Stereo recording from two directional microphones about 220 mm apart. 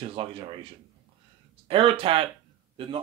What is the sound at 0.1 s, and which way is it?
Speech, 25° right (ahead or behind).